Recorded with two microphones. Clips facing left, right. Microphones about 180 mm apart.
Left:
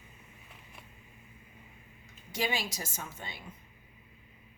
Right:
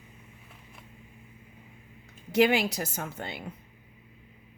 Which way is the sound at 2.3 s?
65° right (ahead or behind).